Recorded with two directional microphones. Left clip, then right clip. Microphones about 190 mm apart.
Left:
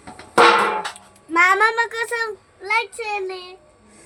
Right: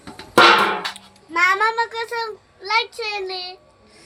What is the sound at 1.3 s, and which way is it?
A child's voice, 50° left (ahead or behind).